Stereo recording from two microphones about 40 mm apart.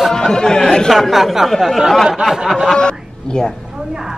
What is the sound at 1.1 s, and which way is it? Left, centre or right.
Speech, centre.